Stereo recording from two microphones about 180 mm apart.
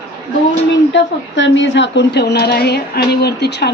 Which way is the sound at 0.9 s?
90° left.